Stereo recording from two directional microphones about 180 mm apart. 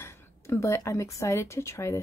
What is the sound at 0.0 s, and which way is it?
Speech, 15° left (ahead or behind).